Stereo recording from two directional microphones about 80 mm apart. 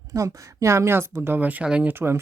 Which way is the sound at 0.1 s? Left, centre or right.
Right.